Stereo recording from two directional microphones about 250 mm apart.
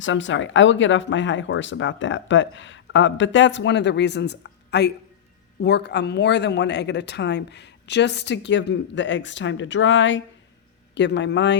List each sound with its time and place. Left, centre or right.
0.0 s speech: left